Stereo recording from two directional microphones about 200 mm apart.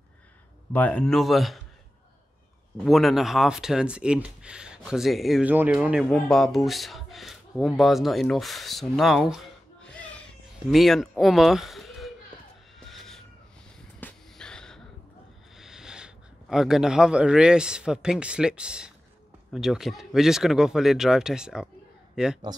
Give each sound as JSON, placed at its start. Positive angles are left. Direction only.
{"t": 0.7, "sound": "speech", "side_deg": 5}
{"t": 2.8, "sound": "speech", "side_deg": 0}
{"t": 12.8, "sound": "owl", "side_deg": 0}
{"t": 13.7, "sound": "a sound", "side_deg": 5}
{"t": 15.5, "sound": "a man's voice", "side_deg": 0}